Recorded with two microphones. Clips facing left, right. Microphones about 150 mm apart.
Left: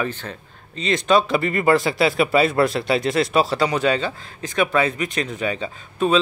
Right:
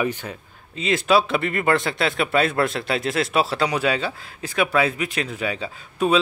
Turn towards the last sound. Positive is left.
turn(degrees=-5)  # may be behind; listen again after turning